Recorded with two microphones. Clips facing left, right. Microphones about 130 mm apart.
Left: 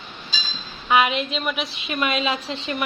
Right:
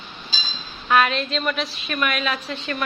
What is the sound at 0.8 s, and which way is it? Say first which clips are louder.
A woman's voice: even; 10° left (ahead or behind).